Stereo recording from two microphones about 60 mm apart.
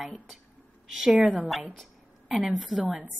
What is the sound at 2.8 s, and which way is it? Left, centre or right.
Speech, right.